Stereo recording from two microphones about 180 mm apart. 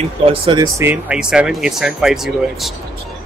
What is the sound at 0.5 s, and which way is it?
Speech, 20° right (ahead or behind).